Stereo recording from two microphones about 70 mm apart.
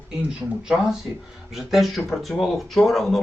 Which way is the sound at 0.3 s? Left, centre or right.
Centre.